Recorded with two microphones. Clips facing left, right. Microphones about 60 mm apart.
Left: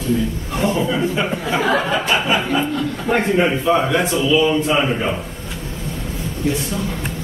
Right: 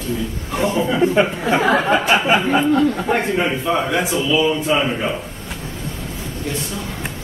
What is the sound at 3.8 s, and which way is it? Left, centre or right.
A man's voice, centre.